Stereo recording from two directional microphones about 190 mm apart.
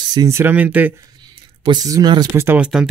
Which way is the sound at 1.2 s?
20° right (ahead or behind).